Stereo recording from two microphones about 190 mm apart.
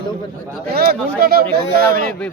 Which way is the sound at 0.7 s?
55° right (ahead or behind).